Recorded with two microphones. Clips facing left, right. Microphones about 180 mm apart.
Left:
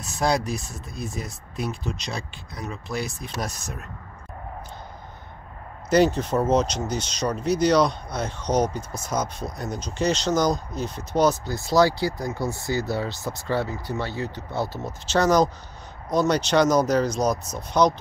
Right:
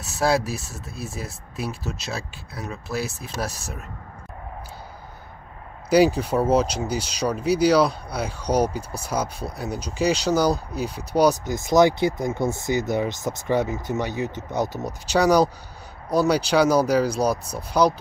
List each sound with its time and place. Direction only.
0.0 s speech: 5° right (ahead or behind)
5.9 s speech: 10° right (ahead or behind)